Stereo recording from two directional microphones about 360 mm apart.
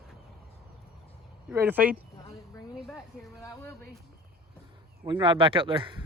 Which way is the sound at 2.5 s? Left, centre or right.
Centre.